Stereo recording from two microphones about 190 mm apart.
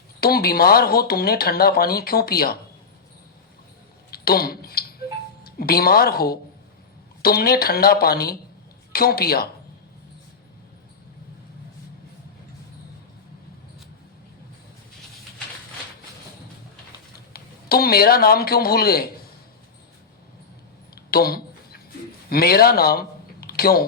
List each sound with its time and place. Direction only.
0.2 s speech: 55° left (ahead or behind)
4.1 s a sound: 55° left (ahead or behind)
5.4 s speech: 55° left (ahead or behind)
17.3 s speech: 55° left (ahead or behind)
20.9 s a sound: 55° left (ahead or behind)
22.3 s speech: 55° left (ahead or behind)